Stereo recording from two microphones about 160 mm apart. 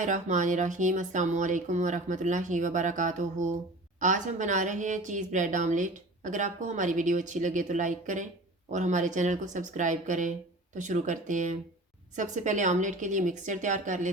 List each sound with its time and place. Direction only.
0.0 s a woman's voice: 50° right (ahead or behind)